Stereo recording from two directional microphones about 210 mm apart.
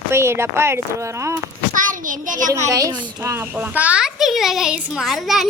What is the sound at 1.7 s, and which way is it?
Child singing, 40° right (ahead or behind).